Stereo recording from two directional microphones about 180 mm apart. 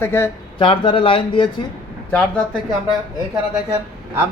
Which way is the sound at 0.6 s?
30° left (ahead or behind).